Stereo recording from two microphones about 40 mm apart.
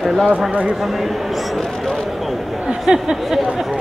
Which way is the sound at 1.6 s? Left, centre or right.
Centre.